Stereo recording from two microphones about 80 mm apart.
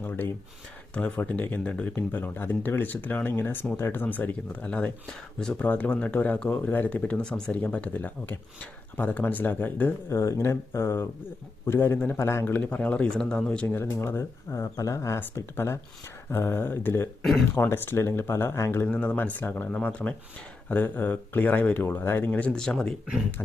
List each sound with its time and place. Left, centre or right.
0.0 s speech: left
10.1 s speech: left
12.7 s speech: centre
13.7 s speech: left
18.9 s speech: centre
22.3 s speech: centre